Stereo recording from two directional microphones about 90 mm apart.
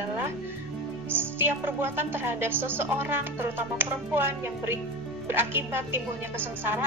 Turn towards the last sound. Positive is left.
turn(degrees=-25)  # may be behind; listen again after turning